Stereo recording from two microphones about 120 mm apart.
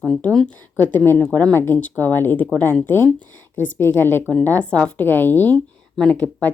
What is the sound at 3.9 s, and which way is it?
Speech, 20° left (ahead or behind).